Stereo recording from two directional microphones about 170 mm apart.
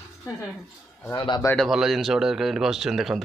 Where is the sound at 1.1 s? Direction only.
25° left (ahead or behind).